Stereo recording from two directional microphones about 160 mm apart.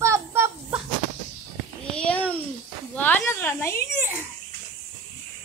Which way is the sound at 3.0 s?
10° left (ahead or behind).